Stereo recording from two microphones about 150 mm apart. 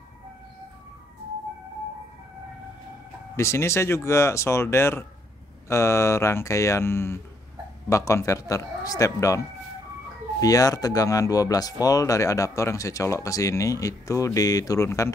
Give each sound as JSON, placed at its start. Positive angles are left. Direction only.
{"t": 3.3, "sound": "speech", "side_deg": 20}
{"t": 10.4, "sound": "speech", "side_deg": 25}